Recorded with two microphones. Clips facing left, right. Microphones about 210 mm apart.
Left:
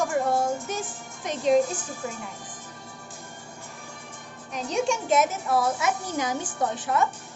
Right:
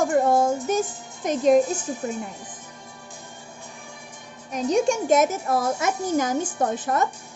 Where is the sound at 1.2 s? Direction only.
45° right (ahead or behind).